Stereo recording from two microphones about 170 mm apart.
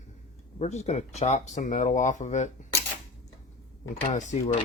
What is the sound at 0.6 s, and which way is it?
Speech, 40° left (ahead or behind).